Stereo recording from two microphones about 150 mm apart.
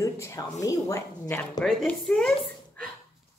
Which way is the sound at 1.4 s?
5° left (ahead or behind).